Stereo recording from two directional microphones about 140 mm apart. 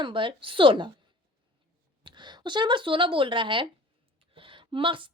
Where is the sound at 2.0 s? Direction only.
35° right (ahead or behind).